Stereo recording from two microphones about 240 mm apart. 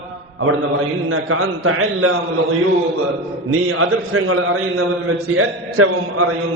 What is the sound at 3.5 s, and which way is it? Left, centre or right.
A man's voice, right.